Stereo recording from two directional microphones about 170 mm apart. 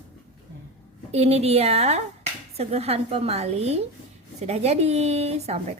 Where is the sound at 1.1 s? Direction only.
40° right (ahead or behind).